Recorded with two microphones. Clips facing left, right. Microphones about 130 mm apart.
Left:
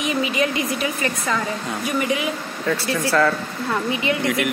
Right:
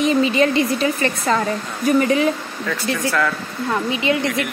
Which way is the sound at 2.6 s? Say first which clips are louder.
Even; 25° left (ahead or behind).